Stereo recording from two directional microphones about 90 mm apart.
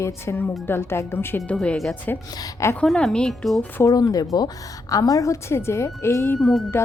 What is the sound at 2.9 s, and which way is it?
Speech, 10° left (ahead or behind).